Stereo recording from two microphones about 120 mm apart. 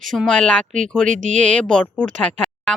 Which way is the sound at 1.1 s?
90° right.